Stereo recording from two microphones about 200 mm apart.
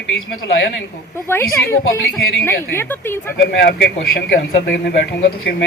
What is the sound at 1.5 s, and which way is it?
Speech, 10° left (ahead or behind).